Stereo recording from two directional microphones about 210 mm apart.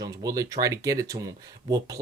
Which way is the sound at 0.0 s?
15° right (ahead or behind).